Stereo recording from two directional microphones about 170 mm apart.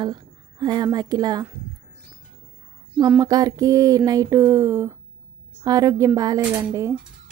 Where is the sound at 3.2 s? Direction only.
20° right (ahead or behind).